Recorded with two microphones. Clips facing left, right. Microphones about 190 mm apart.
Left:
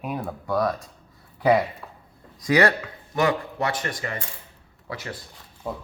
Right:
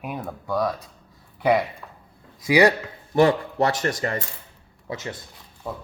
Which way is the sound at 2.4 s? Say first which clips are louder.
Right 2 dB; 10° right (ahead or behind).